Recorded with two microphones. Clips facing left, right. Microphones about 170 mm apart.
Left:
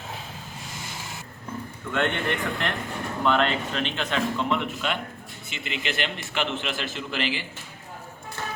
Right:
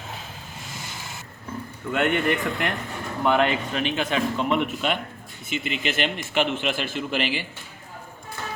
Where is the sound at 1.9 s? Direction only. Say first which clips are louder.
Right 4 dB; 10° right (ahead or behind).